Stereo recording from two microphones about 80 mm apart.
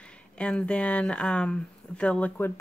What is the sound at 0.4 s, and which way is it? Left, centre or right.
Speech, centre.